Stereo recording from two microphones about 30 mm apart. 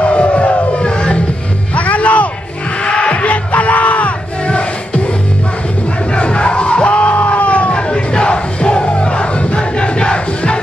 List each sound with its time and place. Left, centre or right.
0.0 s crowd: left
1.8 s music: left
2.8 s music: left
3.5 s crowd: left
4.5 s music: left
6.1 s crowd: left
7.7 s music: left
8.8 s crowd: left